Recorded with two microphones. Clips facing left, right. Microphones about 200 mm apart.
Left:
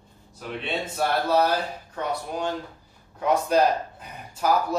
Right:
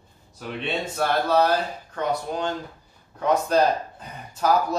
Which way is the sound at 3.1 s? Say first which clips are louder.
Right 1 dB; 10° left (ahead or behind).